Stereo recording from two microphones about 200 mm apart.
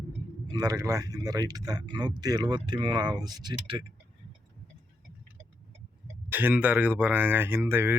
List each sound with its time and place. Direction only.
0.4 s speech: 20° right (ahead or behind)
6.3 s speech: 10° right (ahead or behind)